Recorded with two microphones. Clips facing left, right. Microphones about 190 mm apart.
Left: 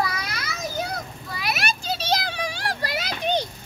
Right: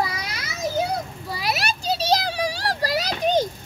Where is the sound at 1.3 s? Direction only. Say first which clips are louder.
Right 2 dB; 35° right (ahead or behind).